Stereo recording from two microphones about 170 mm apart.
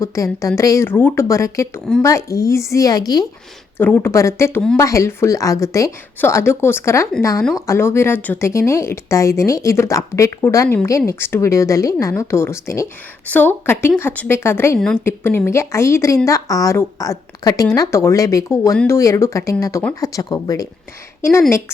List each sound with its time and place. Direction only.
0.0 s a woman's voice: 20° left (ahead or behind)
3.8 s a woman's voice: 10° left (ahead or behind)